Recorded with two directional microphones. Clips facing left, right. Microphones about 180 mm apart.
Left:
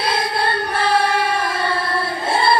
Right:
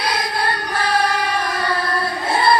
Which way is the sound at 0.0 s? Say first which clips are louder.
Left 2 dB; 25° left (ahead or behind).